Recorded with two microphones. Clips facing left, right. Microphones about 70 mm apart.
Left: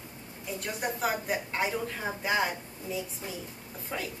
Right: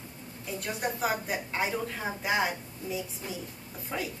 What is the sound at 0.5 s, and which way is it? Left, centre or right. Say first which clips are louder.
A woman's voice: right 1 dB; centre.